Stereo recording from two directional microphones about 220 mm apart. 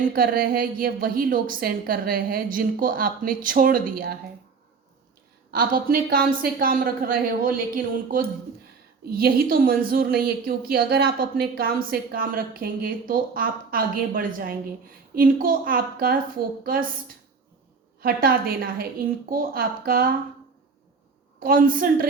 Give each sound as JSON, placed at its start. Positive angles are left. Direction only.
{"t": 0.0, "sound": "a woman's voice", "side_deg": -40}
{"t": 5.5, "sound": "a woman's voice", "side_deg": -40}
{"t": 9.0, "sound": "a woman's voice", "side_deg": -40}
{"t": 18.0, "sound": "a woman's voice", "side_deg": -40}
{"t": 21.3, "sound": "a woman's voice", "side_deg": -40}